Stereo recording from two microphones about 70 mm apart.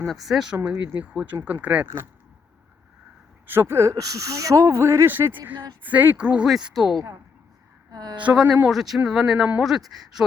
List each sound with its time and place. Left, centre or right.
0.1 s speech: centre
0.5 s speech: right
3.5 s speech: right
3.9 s speech: right
5.0 s speech: right
7.9 s a woman's voice: right
8.2 s speech: centre
8.7 s speech: centre